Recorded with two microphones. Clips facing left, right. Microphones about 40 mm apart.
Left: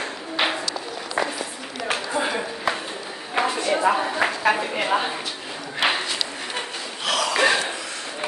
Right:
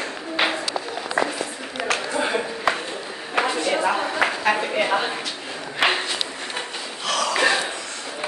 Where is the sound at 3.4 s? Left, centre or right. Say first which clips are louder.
Right 1 dB; right.